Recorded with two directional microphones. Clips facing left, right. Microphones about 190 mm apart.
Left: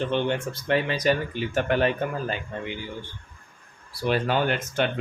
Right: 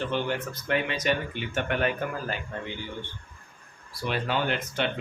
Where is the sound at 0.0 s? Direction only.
20° left (ahead or behind).